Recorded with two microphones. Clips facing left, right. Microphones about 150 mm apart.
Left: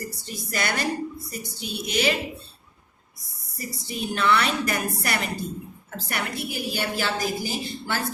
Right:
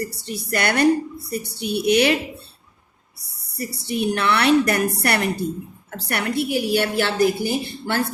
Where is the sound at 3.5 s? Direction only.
70° right (ahead or behind).